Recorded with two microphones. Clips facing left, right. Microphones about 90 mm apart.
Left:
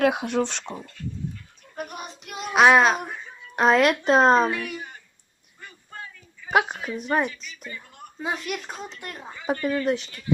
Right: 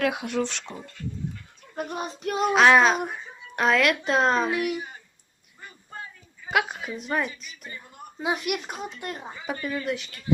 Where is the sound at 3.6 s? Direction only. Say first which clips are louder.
Left 3 dB; 30° left (ahead or behind).